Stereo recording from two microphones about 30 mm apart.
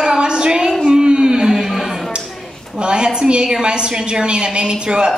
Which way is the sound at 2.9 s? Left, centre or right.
Right.